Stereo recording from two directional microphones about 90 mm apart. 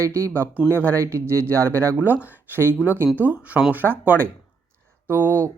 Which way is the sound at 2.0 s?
20° right (ahead or behind).